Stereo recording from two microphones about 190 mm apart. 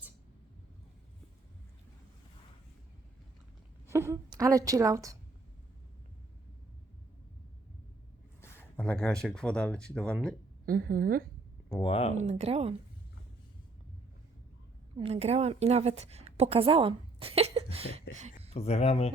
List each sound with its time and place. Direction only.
3.8 s a woman's voice: 15° right (ahead or behind)
8.4 s speech: 10° left (ahead or behind)
10.7 s a woman's voice: 50° right (ahead or behind)
11.7 s speech: 25° left (ahead or behind)
12.2 s speech: 35° right (ahead or behind)
14.9 s a woman's voice: 30° right (ahead or behind)
18.5 s speech: 35° left (ahead or behind)